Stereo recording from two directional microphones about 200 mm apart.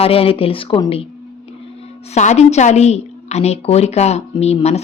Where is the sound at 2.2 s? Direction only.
35° left (ahead or behind).